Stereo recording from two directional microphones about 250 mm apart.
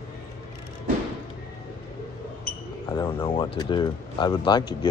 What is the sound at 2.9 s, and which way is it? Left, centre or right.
Speech, centre.